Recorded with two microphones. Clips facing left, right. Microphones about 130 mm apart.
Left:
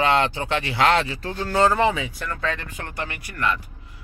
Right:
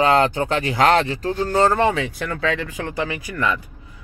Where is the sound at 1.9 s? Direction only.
65° right (ahead or behind); by 2.8 s 90° right.